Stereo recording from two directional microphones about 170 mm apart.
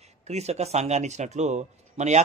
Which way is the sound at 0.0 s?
40° right (ahead or behind).